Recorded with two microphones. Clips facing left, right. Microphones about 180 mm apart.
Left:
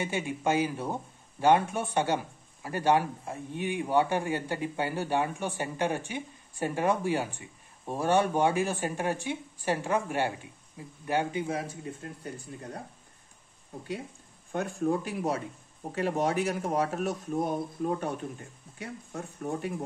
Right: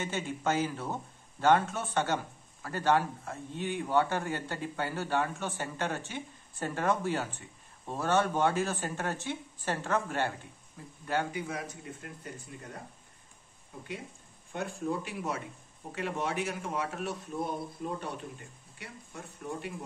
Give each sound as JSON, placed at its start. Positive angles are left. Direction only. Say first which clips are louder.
{"t": 0.0, "sound": "a man's voice", "louder": "left 3 dB", "side_deg": 15}
{"t": 11.4, "sound": "speech", "louder": "left 5 dB", "side_deg": 30}
{"t": 14.5, "sound": "speech", "louder": "left 5 dB", "side_deg": 45}